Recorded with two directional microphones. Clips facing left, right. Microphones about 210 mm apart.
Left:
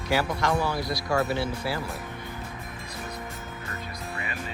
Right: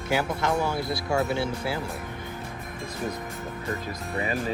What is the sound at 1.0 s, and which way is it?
Speech, centre (ahead or behind).